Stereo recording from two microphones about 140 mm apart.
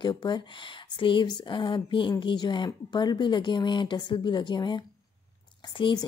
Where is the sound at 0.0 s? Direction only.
35° left (ahead or behind).